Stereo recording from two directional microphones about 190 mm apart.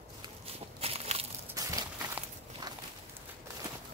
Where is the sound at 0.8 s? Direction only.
30° right (ahead or behind).